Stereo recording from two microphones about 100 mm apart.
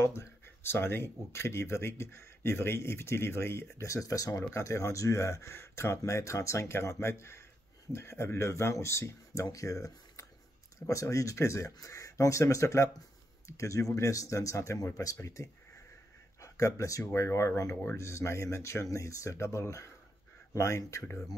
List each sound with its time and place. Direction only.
0.0 s speech: 30° left (ahead or behind)